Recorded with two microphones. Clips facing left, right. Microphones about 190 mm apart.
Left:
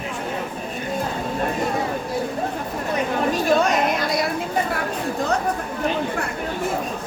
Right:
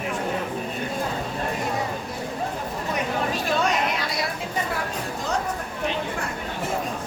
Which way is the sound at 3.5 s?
45° left (ahead or behind).